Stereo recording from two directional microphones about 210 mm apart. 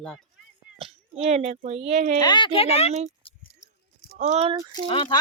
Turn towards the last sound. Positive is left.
turn(degrees=25)  # may be behind; listen again after turning